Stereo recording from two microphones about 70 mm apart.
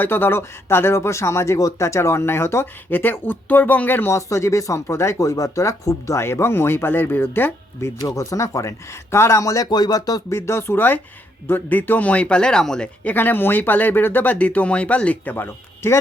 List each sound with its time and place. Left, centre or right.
0.0 s speech: left
2.9 s speech: left
4.1 s speech: left
7.9 s speech: left
9.4 s speech: left
9.6 s speech: left
10.2 s speech: left; by 12.9 s centre
13.1 s speech: left